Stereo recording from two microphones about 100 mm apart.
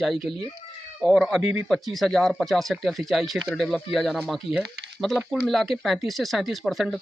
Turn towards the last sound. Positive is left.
turn(degrees=0)  # may be behind; listen again after turning